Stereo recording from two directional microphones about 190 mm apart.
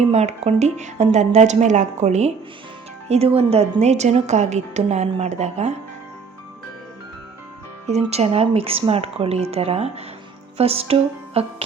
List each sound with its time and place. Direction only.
0.1 s a woman's voice: 35° right (ahead or behind)
7.9 s a woman's voice: 35° right (ahead or behind)
10.6 s music: 30° right (ahead or behind)